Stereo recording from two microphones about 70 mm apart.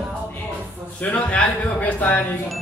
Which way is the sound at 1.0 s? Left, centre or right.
Left.